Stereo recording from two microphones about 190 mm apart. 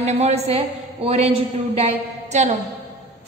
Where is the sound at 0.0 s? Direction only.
35° right (ahead or behind).